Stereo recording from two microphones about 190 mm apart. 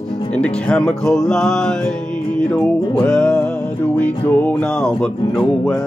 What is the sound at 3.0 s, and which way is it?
Music, 5° left (ahead or behind).